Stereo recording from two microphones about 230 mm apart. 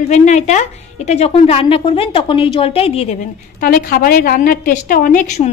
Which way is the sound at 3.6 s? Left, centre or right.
Left.